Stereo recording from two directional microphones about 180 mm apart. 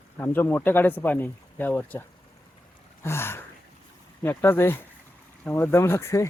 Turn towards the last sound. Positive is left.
turn(degrees=15)  # may be behind; listen again after turning